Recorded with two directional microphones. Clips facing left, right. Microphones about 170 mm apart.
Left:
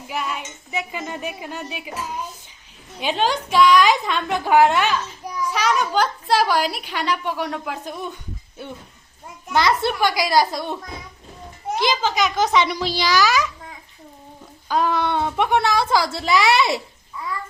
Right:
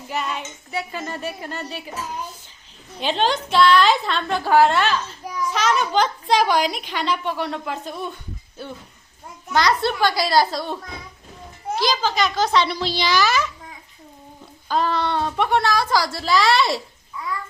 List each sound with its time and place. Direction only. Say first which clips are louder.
0.1 s a sound: right 1 dB; 5° left (ahead or behind)
0.7 s a woman's voice: even; 15° left (ahead or behind)
3.0 s a woman's voice: even; 10° left (ahead or behind)
9.5 s a woman's voice: even; 20° left (ahead or behind)
11.8 s a woman's voice: left 1 dB; 15° left (ahead or behind)
14.7 s a woman's voice: left 1 dB; 15° left (ahead or behind)